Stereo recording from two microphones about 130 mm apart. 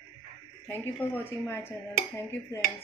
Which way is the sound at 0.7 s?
15° left (ahead or behind).